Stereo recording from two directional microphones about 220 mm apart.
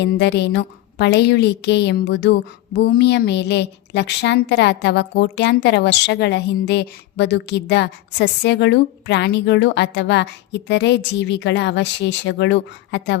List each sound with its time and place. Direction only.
0.0 s a woman's voice: 50° left (ahead or behind)